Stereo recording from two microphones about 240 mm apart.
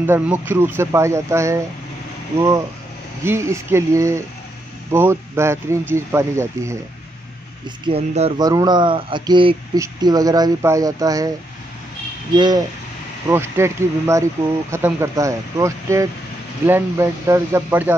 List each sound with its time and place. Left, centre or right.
0.0 s speech: centre
7.8 s speech: right
12.4 s speech: centre